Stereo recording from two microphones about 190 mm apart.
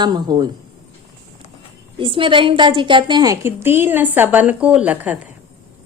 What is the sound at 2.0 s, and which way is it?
A woman's voice, 25° right (ahead or behind).